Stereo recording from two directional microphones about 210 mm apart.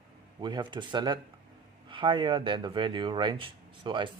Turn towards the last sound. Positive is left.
turn(degrees=-20)  # may be behind; listen again after turning